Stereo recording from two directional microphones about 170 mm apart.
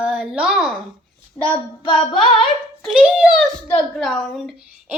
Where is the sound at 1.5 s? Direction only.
30° left (ahead or behind).